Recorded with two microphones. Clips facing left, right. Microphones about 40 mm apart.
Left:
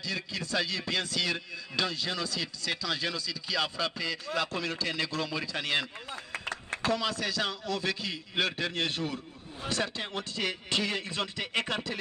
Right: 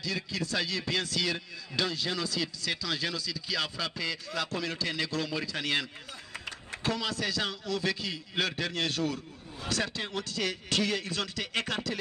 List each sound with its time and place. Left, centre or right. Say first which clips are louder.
0.0 s a man's voice: right 1 dB; centre
4.5 s a man's voice: even; left
4.8 s a man's voice: even; centre
6.5 s a sound: left 6 dB; left
7.1 s a man's voice: left 1 dB; left